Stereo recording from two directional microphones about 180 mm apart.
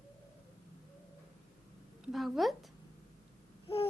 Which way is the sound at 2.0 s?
Centre (ahead or behind).